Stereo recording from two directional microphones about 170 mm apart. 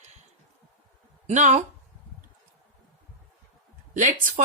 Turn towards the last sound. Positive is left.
turn(degrees=-50)  # may be behind; listen again after turning